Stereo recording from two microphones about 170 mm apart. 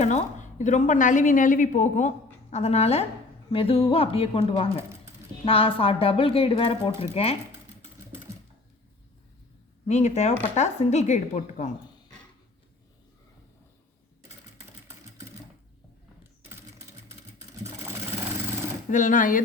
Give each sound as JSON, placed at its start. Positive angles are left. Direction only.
{"t": 0.0, "sound": "a woman's voice", "side_deg": 45}
{"t": 9.8, "sound": "speech", "side_deg": 40}
{"t": 16.4, "sound": "a sound", "side_deg": -15}
{"t": 18.9, "sound": "a woman's voice", "side_deg": 50}